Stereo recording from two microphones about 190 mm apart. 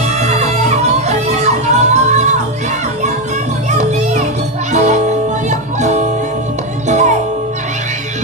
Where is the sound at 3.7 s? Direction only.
40° right (ahead or behind).